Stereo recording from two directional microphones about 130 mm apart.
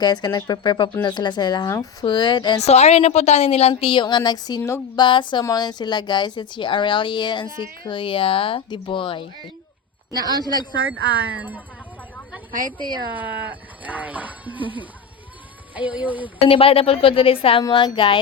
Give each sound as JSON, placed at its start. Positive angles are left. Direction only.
{"t": 0.0, "sound": "a woman's voice", "side_deg": 30}
{"t": 2.6, "sound": "a woman's voice", "side_deg": 60}
{"t": 4.9, "sound": "a woman's voice", "side_deg": 40}
{"t": 10.2, "sound": "speech", "side_deg": -30}
{"t": 10.4, "sound": "a woman's voice", "side_deg": 30}
{"t": 11.3, "sound": "speech", "side_deg": -10}
{"t": 12.5, "sound": "a woman's voice", "side_deg": -90}
{"t": 13.1, "sound": "speech", "side_deg": -10}
{"t": 15.7, "sound": "speech", "side_deg": -10}
{"t": 16.5, "sound": "a woman's voice", "side_deg": 45}